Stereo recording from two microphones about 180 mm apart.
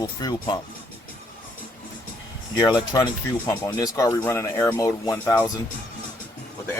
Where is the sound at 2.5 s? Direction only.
25° left (ahead or behind).